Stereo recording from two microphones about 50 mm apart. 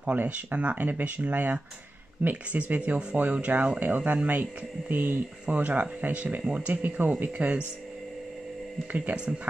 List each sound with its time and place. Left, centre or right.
0.0 s speech: right
6.7 s speech: right
8.9 s speech: right